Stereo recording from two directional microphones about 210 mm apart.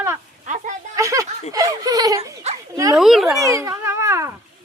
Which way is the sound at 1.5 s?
15° right (ahead or behind).